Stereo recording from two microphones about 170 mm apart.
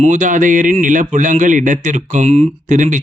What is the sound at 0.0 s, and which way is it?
Speech, 50° right (ahead or behind).